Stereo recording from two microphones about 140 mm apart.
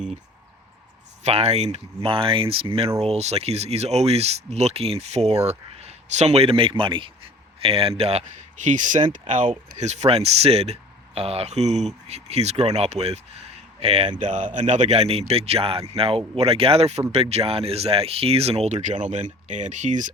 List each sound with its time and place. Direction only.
1.2 s speech: 50° right (ahead or behind)
8.6 s speech: 60° right (ahead or behind)